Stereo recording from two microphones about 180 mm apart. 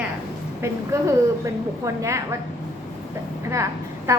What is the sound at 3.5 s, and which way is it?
Speech, 15° right (ahead or behind).